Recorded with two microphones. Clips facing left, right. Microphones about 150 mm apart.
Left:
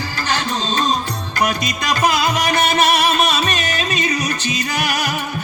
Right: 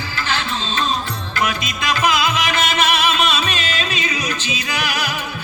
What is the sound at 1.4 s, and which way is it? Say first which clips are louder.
Music: left 2 dB; 40° left (ahead or behind).